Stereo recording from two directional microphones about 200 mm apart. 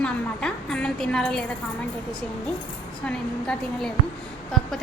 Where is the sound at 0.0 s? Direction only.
5° left (ahead or behind).